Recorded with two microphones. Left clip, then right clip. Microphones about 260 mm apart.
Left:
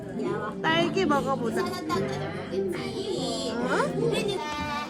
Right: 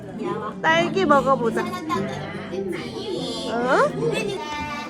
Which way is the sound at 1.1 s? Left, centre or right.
Right.